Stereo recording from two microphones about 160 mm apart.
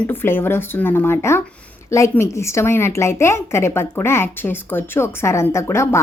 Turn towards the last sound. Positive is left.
turn(degrees=15)  # may be behind; listen again after turning